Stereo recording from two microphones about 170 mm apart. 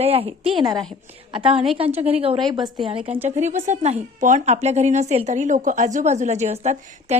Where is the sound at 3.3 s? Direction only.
40° right (ahead or behind).